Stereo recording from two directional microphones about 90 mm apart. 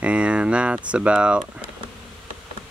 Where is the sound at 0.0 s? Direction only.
15° right (ahead or behind).